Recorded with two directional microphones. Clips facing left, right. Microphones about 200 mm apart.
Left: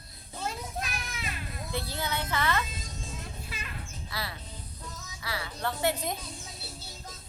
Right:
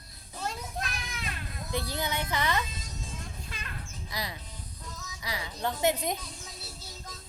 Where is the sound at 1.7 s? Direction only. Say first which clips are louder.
Right 2 dB; 15° right (ahead or behind).